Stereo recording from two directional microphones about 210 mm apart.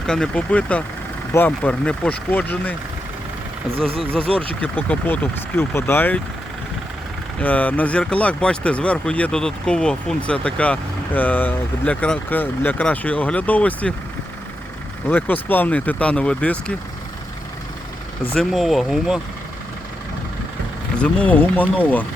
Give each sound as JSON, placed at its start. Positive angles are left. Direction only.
{"t": 0.0, "sound": "speech", "side_deg": 5}
{"t": 3.8, "sound": "speech", "side_deg": -25}
{"t": 4.3, "sound": "speech", "side_deg": 0}
{"t": 7.3, "sound": "speech", "side_deg": 5}
{"t": 15.0, "sound": "speech", "side_deg": 10}
{"t": 18.3, "sound": "speech", "side_deg": 0}
{"t": 20.9, "sound": "speech", "side_deg": 5}